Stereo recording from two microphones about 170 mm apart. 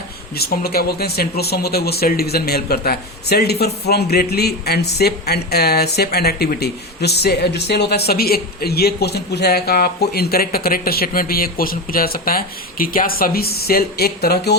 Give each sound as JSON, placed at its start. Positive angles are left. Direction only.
{"t": 0.3, "sound": "speech", "side_deg": 65}